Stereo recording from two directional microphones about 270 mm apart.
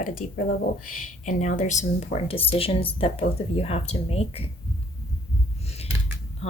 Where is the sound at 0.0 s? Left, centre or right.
Left.